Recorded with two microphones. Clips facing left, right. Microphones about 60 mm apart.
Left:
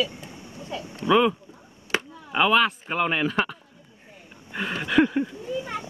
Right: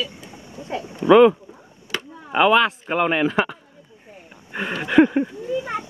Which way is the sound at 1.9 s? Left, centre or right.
Left.